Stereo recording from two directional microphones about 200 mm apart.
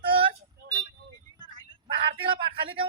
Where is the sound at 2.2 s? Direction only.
25° right (ahead or behind).